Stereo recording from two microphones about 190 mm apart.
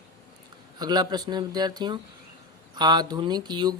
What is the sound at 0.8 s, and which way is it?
Speech, 20° right (ahead or behind).